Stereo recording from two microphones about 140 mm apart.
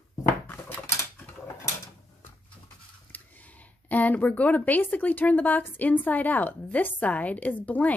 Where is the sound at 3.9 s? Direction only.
10° left (ahead or behind).